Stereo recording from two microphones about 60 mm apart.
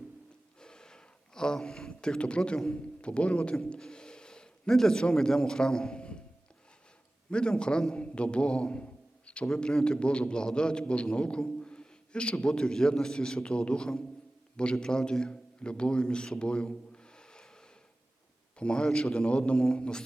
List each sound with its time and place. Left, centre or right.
0.6 s a sound: centre
2.6 s a man's voice: centre
7.3 s a man's voice: centre
18.6 s a man's voice: centre